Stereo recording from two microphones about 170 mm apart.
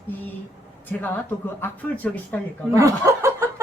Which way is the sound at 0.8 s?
10° left (ahead or behind).